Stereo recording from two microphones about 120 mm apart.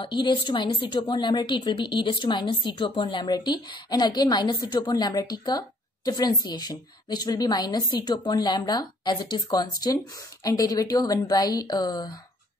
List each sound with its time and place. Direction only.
0.0 s a woman's voice: 40° left (ahead or behind)